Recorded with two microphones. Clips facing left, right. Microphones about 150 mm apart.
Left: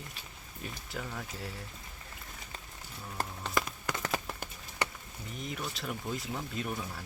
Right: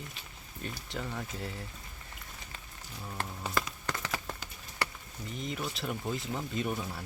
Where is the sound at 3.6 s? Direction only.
15° left (ahead or behind).